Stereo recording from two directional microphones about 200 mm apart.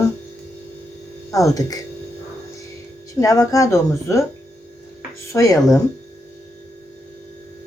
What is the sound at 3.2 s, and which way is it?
Speech, 15° left (ahead or behind).